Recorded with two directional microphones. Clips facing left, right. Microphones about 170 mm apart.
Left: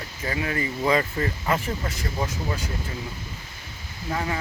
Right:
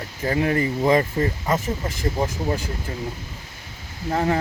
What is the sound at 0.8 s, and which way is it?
Speech, 25° right (ahead or behind).